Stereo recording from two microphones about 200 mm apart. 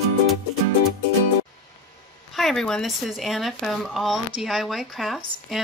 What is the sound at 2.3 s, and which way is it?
Speech, centre (ahead or behind).